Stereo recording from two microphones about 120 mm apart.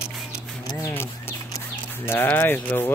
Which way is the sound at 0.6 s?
25° left (ahead or behind).